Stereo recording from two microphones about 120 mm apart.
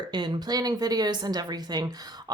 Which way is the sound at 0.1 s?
35° right (ahead or behind).